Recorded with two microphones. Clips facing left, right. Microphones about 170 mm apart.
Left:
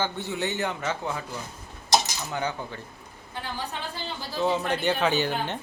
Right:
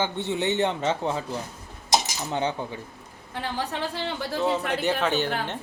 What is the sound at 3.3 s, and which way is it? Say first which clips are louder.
A woman's voice: right 4 dB; 75° right (ahead or behind).